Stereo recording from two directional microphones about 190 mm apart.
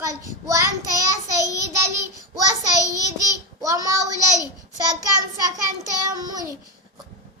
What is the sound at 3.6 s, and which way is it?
Speech, 20° right (ahead or behind).